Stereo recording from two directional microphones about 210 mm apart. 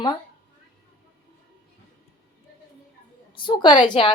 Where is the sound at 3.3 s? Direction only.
25° left (ahead or behind).